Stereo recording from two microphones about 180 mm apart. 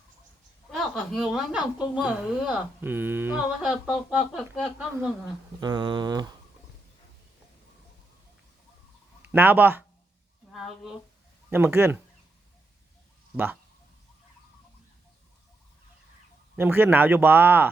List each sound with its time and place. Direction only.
0.7 s speech: centre (ahead or behind)
5.5 s mantra: 25° right (ahead or behind)
9.2 s speech: 10° right (ahead or behind)
11.5 s speech: 15° right (ahead or behind)
13.3 s speech: 10° right (ahead or behind)
16.6 s speech: 10° right (ahead or behind)